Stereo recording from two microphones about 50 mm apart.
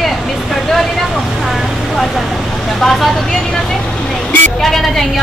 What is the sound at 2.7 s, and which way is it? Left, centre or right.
Speech, centre.